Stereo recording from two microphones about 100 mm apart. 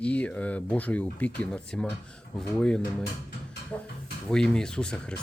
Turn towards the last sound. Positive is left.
turn(degrees=10)  # may be behind; listen again after turning